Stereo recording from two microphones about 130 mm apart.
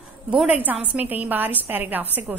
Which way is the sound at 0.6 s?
10° right (ahead or behind).